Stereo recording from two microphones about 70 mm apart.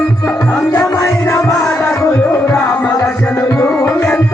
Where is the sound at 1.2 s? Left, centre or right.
Left.